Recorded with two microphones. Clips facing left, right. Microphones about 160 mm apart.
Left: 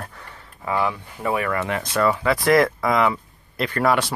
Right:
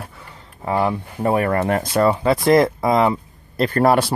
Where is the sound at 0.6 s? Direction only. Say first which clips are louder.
Right 4 dB; 35° right (ahead or behind).